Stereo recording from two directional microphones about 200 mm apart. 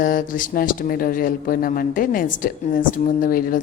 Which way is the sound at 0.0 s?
40° left (ahead or behind).